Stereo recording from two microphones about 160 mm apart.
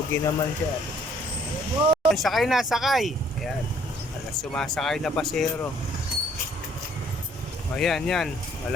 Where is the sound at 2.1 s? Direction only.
Centre (ahead or behind).